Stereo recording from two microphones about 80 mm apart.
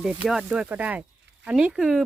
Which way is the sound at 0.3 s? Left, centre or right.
Centre.